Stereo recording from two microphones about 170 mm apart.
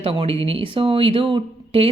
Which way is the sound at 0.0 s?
35° right (ahead or behind).